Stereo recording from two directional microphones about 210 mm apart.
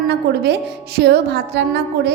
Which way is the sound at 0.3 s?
50° right (ahead or behind).